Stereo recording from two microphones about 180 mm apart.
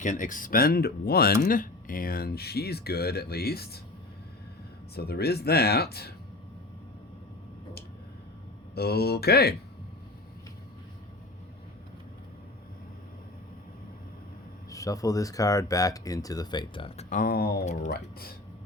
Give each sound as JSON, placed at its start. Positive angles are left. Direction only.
{"t": 0.0, "sound": "speech", "side_deg": 45}
{"t": 4.9, "sound": "speech", "side_deg": 60}
{"t": 8.7, "sound": "speech", "side_deg": 60}
{"t": 14.7, "sound": "speech", "side_deg": 20}
{"t": 17.1, "sound": "speech", "side_deg": 50}